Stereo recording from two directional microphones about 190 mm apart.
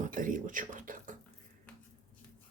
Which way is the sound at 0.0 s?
45° right (ahead or behind).